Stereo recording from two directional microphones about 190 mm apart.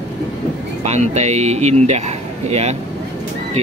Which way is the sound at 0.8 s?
35° right (ahead or behind).